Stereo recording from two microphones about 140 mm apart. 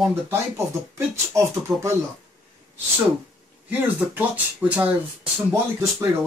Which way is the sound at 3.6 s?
10° right (ahead or behind).